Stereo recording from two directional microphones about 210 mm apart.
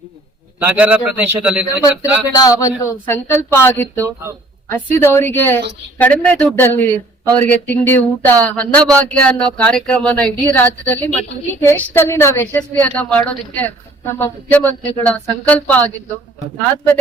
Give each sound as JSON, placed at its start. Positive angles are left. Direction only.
{"t": 0.6, "sound": "a man's voice", "side_deg": -10}
{"t": 1.6, "sound": "a woman's voice", "side_deg": 15}
{"t": 4.0, "sound": "a man's voice", "side_deg": -15}
{"t": 4.7, "sound": "a woman's voice", "side_deg": 10}